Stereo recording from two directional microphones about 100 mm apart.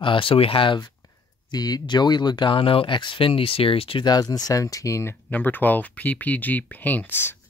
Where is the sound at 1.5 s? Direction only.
40° left (ahead or behind); by 4.0 s 70° left (ahead or behind).